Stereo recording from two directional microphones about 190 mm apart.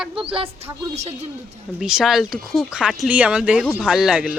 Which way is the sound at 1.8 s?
5° right (ahead or behind).